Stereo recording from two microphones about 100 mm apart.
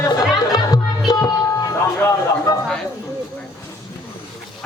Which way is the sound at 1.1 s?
40° left (ahead or behind).